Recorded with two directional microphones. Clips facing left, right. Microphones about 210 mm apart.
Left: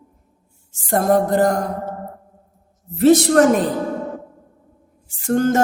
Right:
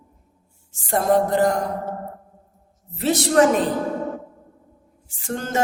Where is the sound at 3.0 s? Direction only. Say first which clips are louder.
Left 6 dB; 50° left (ahead or behind).